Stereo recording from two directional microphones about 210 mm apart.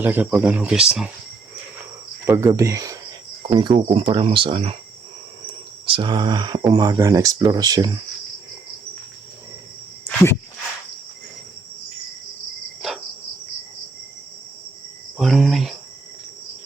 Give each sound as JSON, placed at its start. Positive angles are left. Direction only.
{"t": 0.0, "sound": "speech", "side_deg": -10}
{"t": 2.2, "sound": "speech", "side_deg": -10}
{"t": 5.8, "sound": "speech", "side_deg": -25}
{"t": 12.8, "sound": "cricket", "side_deg": 0}
{"t": 15.2, "sound": "cricket", "side_deg": 0}